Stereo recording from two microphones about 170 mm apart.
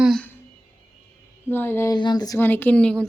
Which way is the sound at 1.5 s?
10° left (ahead or behind).